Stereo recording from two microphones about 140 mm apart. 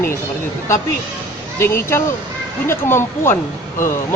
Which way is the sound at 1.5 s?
15° left (ahead or behind).